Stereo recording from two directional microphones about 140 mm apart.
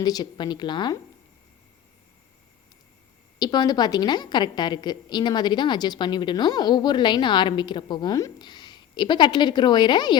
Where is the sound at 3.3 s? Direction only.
30° left (ahead or behind).